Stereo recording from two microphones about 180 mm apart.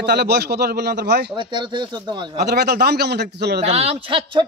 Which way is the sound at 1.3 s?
25° right (ahead or behind).